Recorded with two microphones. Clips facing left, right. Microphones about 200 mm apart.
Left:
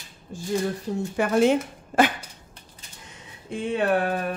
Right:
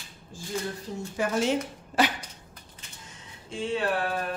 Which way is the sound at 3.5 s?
55° left (ahead or behind).